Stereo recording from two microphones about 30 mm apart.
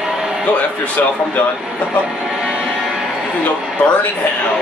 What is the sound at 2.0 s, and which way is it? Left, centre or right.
Speech, centre.